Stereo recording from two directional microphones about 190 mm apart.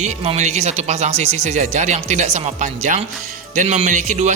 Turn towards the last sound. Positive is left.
turn(degrees=-40)  # may be behind; listen again after turning